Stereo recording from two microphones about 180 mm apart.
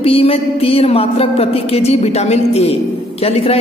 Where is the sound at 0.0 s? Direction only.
30° left (ahead or behind).